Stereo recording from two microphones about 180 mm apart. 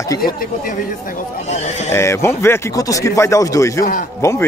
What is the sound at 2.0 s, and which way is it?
A man's voice, 15° left (ahead or behind).